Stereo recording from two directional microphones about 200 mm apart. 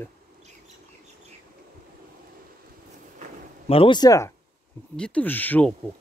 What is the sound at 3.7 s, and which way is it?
Speech, 25° left (ahead or behind).